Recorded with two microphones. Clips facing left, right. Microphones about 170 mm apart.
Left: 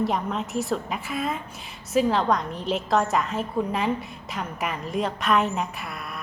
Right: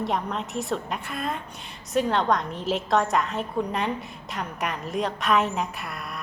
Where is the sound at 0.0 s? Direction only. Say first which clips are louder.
Left 2 dB; centre (ahead or behind).